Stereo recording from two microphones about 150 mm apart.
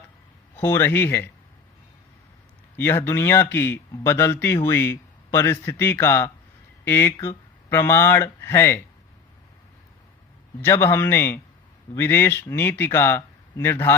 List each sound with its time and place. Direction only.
0.5 s speech: 15° left (ahead or behind)
2.7 s speech: 15° left (ahead or behind)
10.6 s speech: 15° left (ahead or behind)